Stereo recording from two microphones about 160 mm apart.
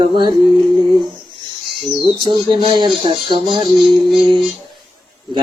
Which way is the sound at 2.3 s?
30° right (ahead or behind).